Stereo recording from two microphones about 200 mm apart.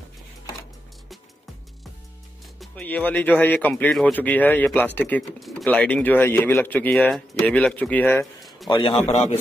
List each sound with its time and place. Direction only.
2.6 s speech: 5° left (ahead or behind)
8.4 s a sound: centre (ahead or behind)
8.6 s a man's voice: 20° left (ahead or behind)
9.0 s a man's voice: 35° left (ahead or behind)